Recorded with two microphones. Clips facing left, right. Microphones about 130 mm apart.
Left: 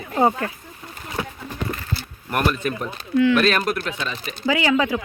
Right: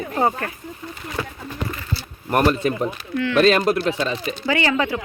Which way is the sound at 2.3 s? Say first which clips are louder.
Right 4 dB; 30° right (ahead or behind).